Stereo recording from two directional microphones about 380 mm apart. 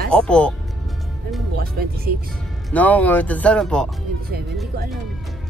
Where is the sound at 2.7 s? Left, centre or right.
Centre.